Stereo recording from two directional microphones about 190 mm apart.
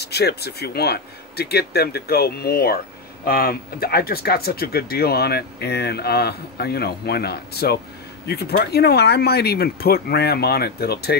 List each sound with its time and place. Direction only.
0.0 s speech: 55° left (ahead or behind)